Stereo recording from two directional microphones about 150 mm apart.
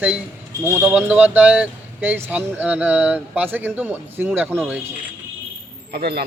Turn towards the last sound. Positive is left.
turn(degrees=-90)